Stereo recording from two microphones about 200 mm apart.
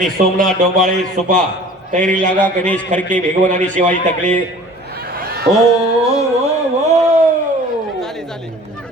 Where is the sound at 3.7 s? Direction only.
40° right (ahead or behind).